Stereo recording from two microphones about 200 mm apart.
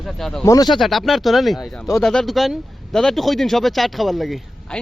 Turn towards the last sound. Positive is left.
turn(degrees=0)  # may be behind; listen again after turning